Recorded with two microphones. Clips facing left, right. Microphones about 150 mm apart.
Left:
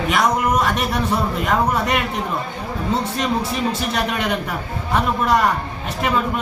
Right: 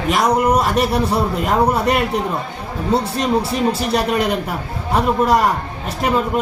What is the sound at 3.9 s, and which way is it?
A man's voice, 35° right (ahead or behind).